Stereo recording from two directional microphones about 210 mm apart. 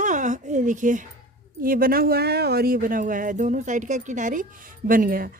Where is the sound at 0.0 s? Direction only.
35° right (ahead or behind).